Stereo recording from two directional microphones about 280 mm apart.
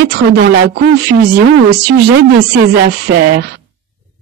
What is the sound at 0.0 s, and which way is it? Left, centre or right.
Speech, right.